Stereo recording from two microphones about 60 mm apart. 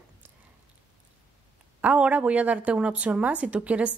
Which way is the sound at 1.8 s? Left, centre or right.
Right.